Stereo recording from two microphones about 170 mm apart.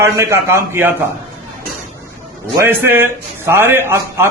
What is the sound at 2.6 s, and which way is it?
Speech, 15° right (ahead or behind).